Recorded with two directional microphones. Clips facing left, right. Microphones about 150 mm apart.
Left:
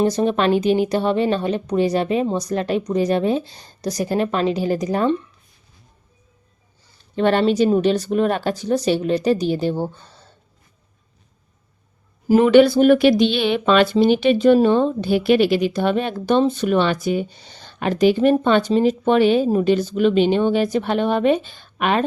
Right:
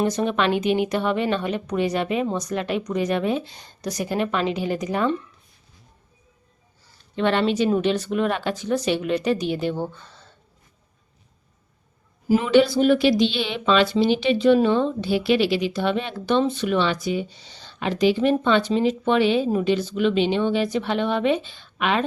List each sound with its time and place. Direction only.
0.0 s speech: 35° left (ahead or behind)
7.2 s speech: 40° left (ahead or behind)
12.3 s speech: 55° left (ahead or behind)